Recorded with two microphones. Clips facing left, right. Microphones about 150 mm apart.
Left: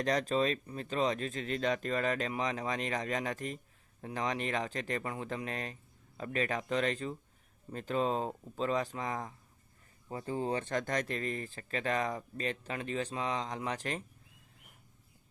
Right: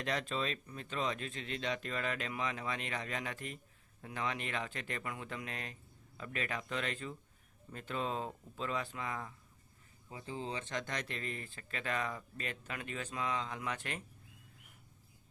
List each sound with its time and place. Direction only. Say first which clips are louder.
0.0 s speech: left 7 dB; 40° left (ahead or behind)
10.1 s speech: left 7 dB; 50° left (ahead or behind)